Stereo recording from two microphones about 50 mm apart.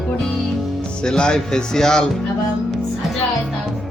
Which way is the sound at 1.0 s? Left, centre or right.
Centre.